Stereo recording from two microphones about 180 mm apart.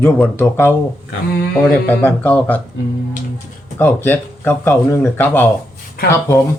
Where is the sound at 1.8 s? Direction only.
10° left (ahead or behind).